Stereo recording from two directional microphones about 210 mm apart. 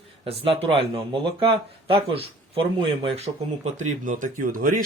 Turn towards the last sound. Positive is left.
turn(degrees=-40)  # may be behind; listen again after turning